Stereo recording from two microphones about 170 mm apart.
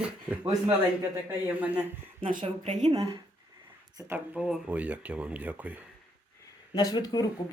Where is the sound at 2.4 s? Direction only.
40° right (ahead or behind).